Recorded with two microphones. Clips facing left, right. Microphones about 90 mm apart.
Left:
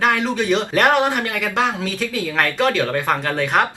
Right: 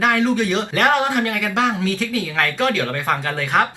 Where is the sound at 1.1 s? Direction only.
15° left (ahead or behind).